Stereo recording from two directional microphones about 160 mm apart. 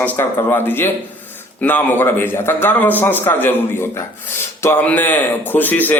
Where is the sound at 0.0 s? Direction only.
15° left (ahead or behind).